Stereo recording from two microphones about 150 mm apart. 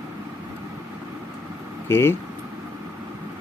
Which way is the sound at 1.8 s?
15° left (ahead or behind).